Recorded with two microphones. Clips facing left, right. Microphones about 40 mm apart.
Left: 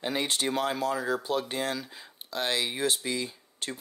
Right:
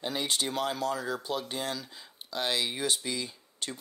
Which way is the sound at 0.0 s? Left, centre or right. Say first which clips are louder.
Left 2 dB; centre.